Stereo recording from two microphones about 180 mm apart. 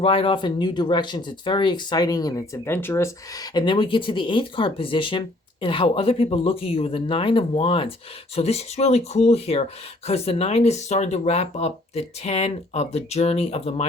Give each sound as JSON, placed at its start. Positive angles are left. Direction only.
{"t": 0.0, "sound": "speech", "side_deg": 30}